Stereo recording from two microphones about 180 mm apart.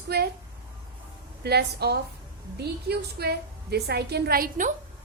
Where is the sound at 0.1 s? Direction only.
65° right (ahead or behind).